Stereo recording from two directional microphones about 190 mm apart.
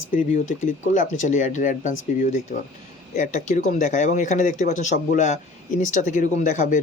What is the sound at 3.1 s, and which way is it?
Speech, 40° left (ahead or behind).